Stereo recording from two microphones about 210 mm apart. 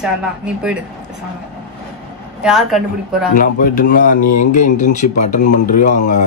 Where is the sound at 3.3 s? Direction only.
40° left (ahead or behind).